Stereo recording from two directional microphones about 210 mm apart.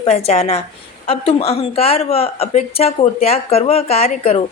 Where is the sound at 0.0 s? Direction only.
30° left (ahead or behind).